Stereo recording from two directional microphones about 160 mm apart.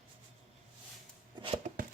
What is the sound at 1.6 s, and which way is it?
Chopping, 50° right (ahead or behind).